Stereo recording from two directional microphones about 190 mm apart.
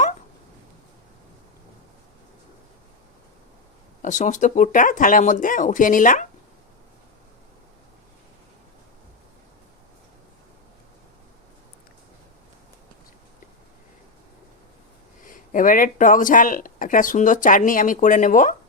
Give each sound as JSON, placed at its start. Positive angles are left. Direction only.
{"t": 4.0, "sound": "speech", "side_deg": 40}
{"t": 15.3, "sound": "speech", "side_deg": 45}